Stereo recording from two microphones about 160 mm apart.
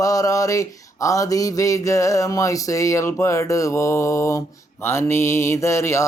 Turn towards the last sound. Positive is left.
turn(degrees=20)  # may be behind; listen again after turning